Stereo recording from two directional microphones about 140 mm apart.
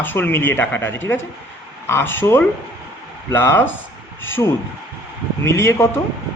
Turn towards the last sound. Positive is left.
turn(degrees=20)  # may be behind; listen again after turning